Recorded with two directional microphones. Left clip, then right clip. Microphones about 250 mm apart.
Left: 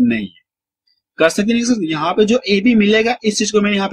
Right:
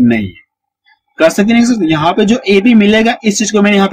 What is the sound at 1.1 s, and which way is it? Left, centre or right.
Speech, centre.